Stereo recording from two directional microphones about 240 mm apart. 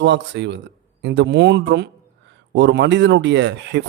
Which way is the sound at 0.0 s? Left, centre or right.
Right.